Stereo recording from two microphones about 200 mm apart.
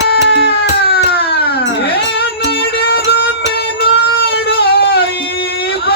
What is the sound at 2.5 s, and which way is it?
Music, 50° left (ahead or behind).